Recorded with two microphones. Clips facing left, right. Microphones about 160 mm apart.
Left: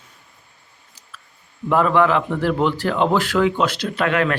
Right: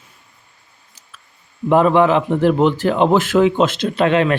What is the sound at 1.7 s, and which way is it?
A man's voice, 20° right (ahead or behind).